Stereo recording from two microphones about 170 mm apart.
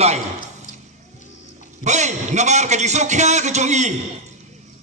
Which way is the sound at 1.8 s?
45° right (ahead or behind).